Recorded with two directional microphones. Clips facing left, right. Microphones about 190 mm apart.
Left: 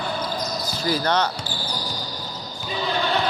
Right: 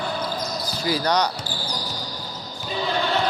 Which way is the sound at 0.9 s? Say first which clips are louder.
Even; 10° right (ahead or behind).